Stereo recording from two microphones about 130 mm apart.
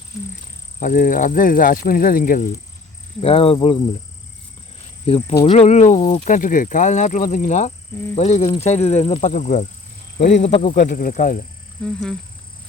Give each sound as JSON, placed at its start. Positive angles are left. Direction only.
{"t": 0.8, "sound": "speech", "side_deg": 90}
{"t": 3.2, "sound": "speech", "side_deg": 50}
{"t": 5.5, "sound": "speech", "side_deg": 55}
{"t": 6.2, "sound": "speech", "side_deg": 85}
{"t": 8.1, "sound": "speech", "side_deg": 55}
{"t": 9.3, "sound": "speech", "side_deg": 65}
{"t": 10.8, "sound": "speech", "side_deg": 90}
{"t": 11.8, "sound": "wild animals", "side_deg": 5}